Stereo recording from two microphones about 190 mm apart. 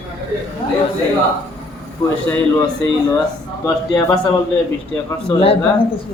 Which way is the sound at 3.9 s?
20° left (ahead or behind).